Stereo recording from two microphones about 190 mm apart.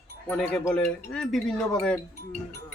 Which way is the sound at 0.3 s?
5° left (ahead or behind).